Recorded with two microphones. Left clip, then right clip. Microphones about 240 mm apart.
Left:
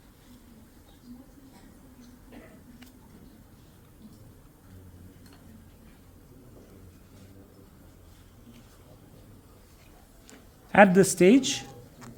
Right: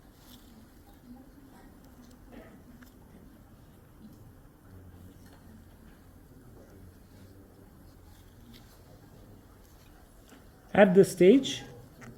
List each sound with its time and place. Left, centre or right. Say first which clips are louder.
10.7 s speech: left 2 dB; left